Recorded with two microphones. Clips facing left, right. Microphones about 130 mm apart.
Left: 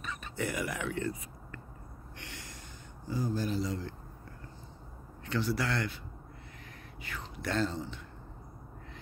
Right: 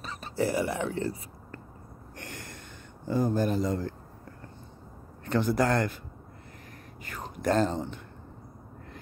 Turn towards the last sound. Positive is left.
turn(degrees=-50)  # may be behind; listen again after turning